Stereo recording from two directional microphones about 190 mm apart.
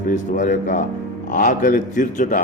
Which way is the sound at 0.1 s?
40° left (ahead or behind).